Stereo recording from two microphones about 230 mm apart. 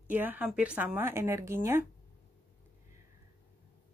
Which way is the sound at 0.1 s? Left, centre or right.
Centre.